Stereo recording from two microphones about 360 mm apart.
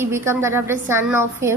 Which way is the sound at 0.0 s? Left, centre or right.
Centre.